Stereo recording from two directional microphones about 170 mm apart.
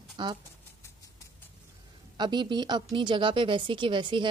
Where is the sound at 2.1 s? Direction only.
25° right (ahead or behind).